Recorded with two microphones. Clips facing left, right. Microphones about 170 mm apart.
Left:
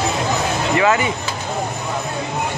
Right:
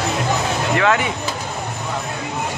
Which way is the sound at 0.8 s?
5° left (ahead or behind).